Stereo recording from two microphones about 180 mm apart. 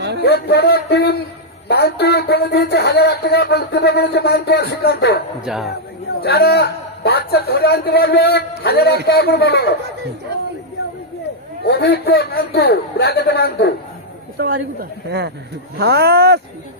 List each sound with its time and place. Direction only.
0.2 s speech: 65° left (ahead or behind)
5.5 s speech: centre (ahead or behind)
6.1 s speech: 60° left (ahead or behind)
11.6 s speech: 65° left (ahead or behind)
14.3 s speech: 65° right (ahead or behind)